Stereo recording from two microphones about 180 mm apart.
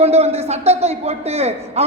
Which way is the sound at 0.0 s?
35° right (ahead or behind).